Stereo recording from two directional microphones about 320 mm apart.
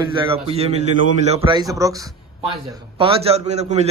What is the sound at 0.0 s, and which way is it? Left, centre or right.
A man's voice, centre.